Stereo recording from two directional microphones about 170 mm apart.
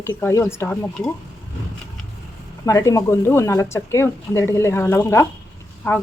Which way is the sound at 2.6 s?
20° left (ahead or behind).